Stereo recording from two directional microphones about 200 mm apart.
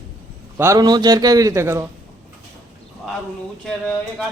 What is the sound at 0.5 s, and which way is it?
A man's voice, 15° right (ahead or behind).